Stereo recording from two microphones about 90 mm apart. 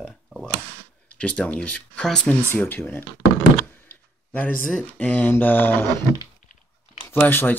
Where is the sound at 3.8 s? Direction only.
20° left (ahead or behind).